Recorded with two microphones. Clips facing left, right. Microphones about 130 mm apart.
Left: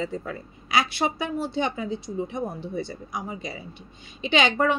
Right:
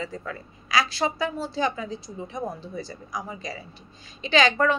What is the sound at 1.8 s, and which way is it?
Speech, 60° left (ahead or behind).